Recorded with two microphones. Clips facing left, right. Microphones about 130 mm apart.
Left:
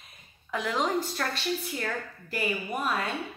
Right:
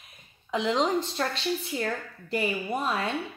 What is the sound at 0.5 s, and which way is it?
A woman's voice, 25° right (ahead or behind).